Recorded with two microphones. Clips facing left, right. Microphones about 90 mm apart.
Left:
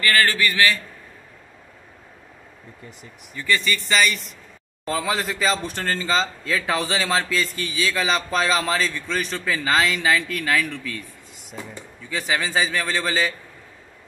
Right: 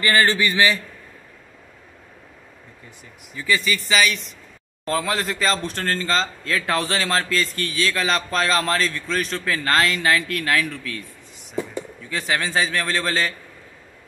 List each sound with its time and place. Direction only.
0.0 s a man's voice: 25° right (ahead or behind)
3.3 s speech: 5° right (ahead or behind)